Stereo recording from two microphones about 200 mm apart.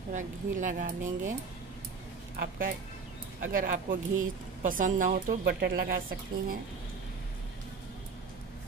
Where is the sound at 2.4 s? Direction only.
50° right (ahead or behind).